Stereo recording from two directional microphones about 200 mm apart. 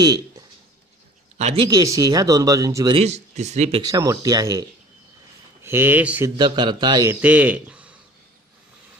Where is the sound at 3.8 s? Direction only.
15° right (ahead or behind).